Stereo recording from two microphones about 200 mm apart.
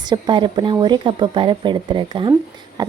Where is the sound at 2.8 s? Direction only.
20° right (ahead or behind).